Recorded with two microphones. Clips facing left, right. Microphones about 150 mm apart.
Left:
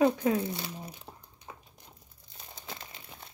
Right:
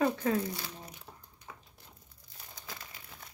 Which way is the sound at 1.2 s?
20° left (ahead or behind).